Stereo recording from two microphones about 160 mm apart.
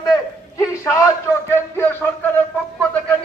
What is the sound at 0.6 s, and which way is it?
A man's voice, 20° left (ahead or behind).